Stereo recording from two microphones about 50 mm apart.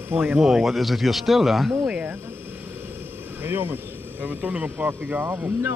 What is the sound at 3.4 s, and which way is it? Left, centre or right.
Speech, right.